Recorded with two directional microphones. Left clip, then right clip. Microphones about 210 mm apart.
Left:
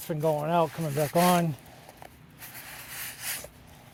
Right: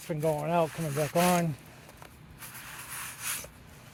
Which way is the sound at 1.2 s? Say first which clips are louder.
Left 3 dB; 40° left (ahead or behind).